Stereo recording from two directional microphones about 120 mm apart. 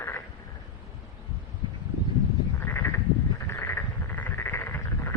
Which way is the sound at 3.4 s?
20° left (ahead or behind).